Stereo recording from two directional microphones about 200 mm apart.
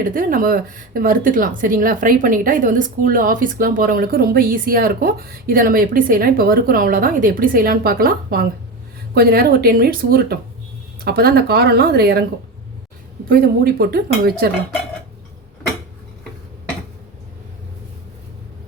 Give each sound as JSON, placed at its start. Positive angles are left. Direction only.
{"t": 0.0, "sound": "a woman's voice", "side_deg": -45}
{"t": 13.2, "sound": "a woman's voice", "side_deg": -45}